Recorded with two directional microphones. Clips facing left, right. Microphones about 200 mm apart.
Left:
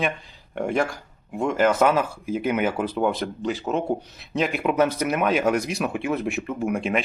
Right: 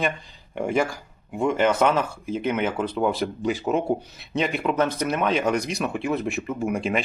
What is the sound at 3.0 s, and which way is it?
Speech, 5° right (ahead or behind).